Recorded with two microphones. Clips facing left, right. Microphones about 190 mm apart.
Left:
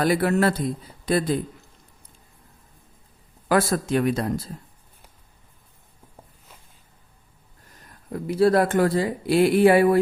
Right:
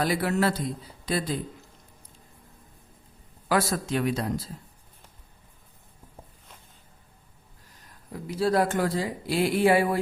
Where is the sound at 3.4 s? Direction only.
55° left (ahead or behind).